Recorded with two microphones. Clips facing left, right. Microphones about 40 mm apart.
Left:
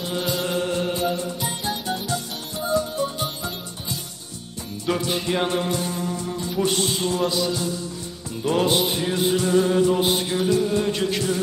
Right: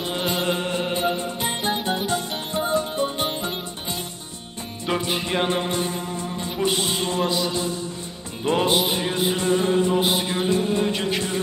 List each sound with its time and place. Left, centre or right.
0.0 s music: right
4.8 s music: right
9.9 s mantra: centre
10.3 s music: right
10.8 s music: centre